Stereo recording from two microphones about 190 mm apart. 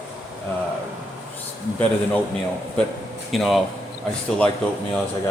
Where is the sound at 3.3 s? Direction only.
Centre (ahead or behind).